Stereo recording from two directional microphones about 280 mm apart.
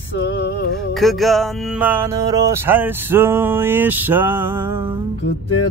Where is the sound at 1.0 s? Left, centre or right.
Centre.